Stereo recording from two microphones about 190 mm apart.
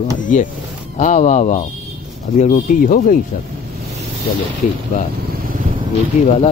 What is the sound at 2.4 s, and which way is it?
Speech, 45° left (ahead or behind).